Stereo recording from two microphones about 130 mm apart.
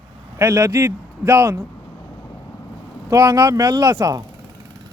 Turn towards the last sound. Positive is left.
turn(degrees=-25)  # may be behind; listen again after turning